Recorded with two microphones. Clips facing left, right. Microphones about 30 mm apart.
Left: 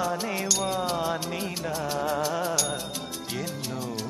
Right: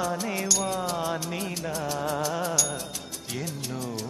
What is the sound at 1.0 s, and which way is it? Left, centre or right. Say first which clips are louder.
Music: left 1 dB; centre.